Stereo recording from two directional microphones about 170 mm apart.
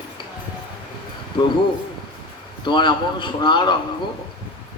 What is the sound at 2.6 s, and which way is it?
A man's voice, 30° left (ahead or behind).